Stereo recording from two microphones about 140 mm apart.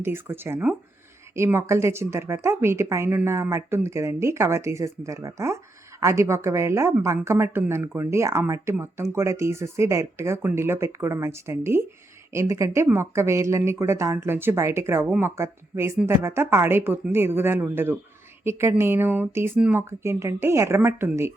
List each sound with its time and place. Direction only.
0.0 s speech: 15° right (ahead or behind)